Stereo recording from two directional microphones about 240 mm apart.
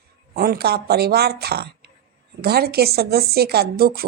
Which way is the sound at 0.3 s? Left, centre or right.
Right.